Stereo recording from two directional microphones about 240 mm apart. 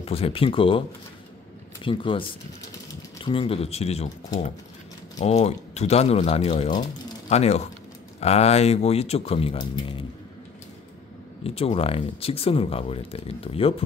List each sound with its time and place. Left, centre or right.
0.0 s speech: left
1.9 s speech: left
3.3 s speech: left
11.4 s speech: left